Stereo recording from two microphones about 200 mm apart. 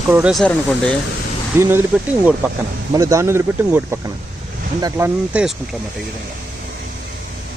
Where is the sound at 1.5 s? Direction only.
15° right (ahead or behind).